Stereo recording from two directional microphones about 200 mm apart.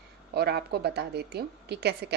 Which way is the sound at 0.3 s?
55° right (ahead or behind).